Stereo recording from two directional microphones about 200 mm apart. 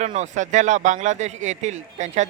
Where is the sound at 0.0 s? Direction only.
35° right (ahead or behind).